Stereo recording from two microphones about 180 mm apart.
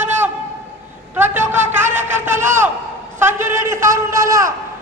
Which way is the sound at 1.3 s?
10° right (ahead or behind).